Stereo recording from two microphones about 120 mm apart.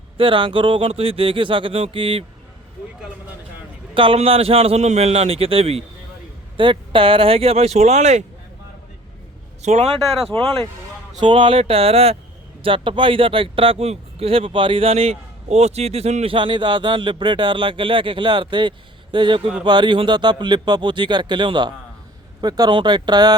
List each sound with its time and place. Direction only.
0.2 s speech: 45° right (ahead or behind)
3.9 s a man's voice: 50° right (ahead or behind); by 8.2 s 75° right (ahead or behind)
9.6 s a man's voice: 70° right (ahead or behind)
10.2 s speech: 50° right (ahead or behind)
12.6 s speech: 45° right (ahead or behind); by 16.3 s 60° right (ahead or behind)
16.3 s speech: 40° right (ahead or behind)